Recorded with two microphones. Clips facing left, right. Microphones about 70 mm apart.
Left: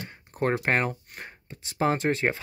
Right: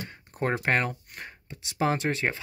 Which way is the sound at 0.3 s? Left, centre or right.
Centre.